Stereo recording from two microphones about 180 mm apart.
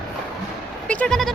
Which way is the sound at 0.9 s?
5° left (ahead or behind).